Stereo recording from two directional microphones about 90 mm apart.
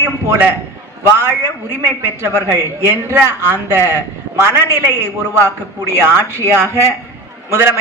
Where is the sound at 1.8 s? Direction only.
30° right (ahead or behind).